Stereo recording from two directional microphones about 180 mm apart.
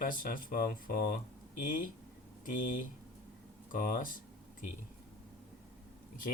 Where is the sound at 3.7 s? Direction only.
50° left (ahead or behind).